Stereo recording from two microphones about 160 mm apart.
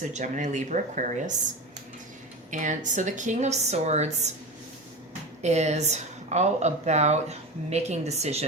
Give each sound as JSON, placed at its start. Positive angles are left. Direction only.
{"t": 0.0, "sound": "a woman's voice", "side_deg": -50}
{"t": 2.5, "sound": "a woman's voice", "side_deg": -50}
{"t": 5.4, "sound": "a woman's voice", "side_deg": -45}